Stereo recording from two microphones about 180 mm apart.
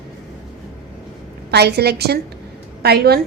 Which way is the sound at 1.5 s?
65° right (ahead or behind).